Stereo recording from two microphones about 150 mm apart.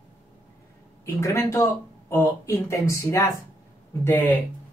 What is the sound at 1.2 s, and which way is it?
Speech, 20° left (ahead or behind).